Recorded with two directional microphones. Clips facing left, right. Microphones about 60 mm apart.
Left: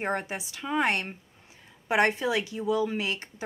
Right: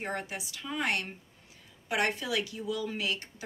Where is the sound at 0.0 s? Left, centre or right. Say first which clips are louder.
Left 5 dB; left.